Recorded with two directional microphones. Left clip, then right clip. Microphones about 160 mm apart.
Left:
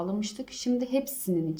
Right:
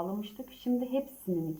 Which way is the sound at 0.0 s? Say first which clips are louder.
Left 4 dB; 5° left (ahead or behind).